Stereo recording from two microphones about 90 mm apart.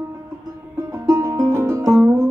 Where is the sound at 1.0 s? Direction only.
35° right (ahead or behind).